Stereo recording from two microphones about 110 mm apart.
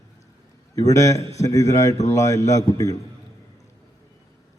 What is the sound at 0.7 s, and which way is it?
A man's voice, 30° left (ahead or behind).